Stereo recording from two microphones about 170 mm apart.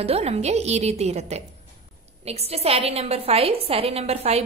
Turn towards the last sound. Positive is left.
turn(degrees=-35)  # may be behind; listen again after turning